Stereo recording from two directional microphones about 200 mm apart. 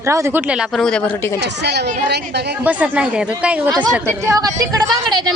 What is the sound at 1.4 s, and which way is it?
Speech, 60° right (ahead or behind).